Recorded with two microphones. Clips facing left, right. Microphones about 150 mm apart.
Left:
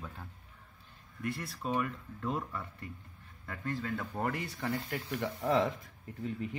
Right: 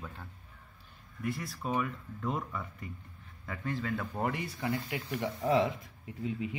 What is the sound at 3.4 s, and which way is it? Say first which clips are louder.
Speech: right 1 dB; 20° right (ahead or behind).